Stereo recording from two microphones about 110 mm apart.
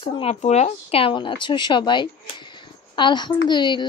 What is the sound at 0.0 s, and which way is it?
Speech, 65° left (ahead or behind).